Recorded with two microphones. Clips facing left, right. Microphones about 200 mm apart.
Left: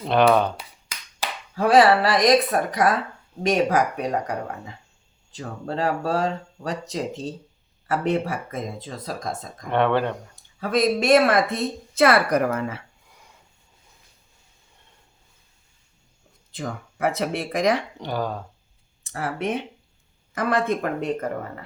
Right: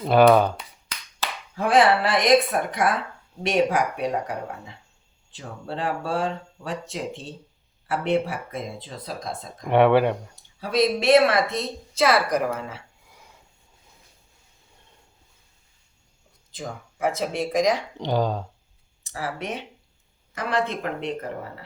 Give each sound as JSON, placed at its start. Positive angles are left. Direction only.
{"t": 0.0, "sound": "speech", "side_deg": -5}
{"t": 0.5, "sound": "finger snapping", "side_deg": 10}
{"t": 1.5, "sound": "speech", "side_deg": 35}
{"t": 5.4, "sound": "speech", "side_deg": 40}
{"t": 9.6, "sound": "speech", "side_deg": -10}
{"t": 10.6, "sound": "speech", "side_deg": 50}
{"t": 16.5, "sound": "speech", "side_deg": 60}
{"t": 18.0, "sound": "speech", "side_deg": -15}
{"t": 19.0, "sound": "speech", "side_deg": 55}